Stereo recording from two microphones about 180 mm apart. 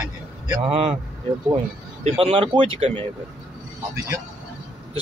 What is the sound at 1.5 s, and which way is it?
Speech, 30° right (ahead or behind).